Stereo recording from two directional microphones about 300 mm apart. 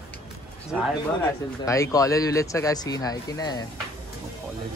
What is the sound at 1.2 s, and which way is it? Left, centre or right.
Speech, centre.